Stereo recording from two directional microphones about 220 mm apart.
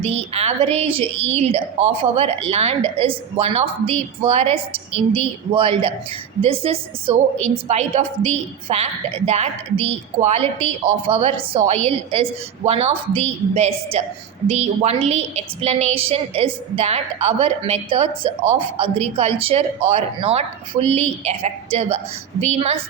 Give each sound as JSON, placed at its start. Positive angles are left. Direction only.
{"t": 0.0, "sound": "a woman's voice", "side_deg": -30}